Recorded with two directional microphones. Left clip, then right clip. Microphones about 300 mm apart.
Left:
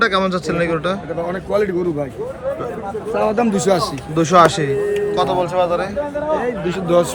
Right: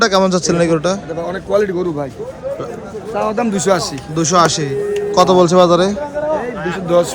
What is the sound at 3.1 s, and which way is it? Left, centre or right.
Speech, centre.